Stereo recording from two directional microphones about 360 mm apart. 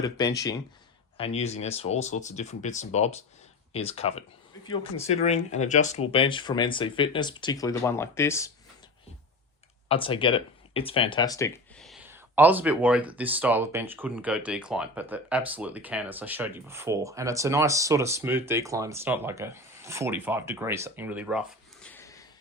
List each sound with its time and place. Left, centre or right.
0.0 s speech: centre
9.9 s speech: centre